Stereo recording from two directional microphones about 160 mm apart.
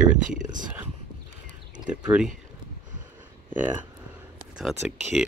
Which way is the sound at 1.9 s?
5° right (ahead or behind).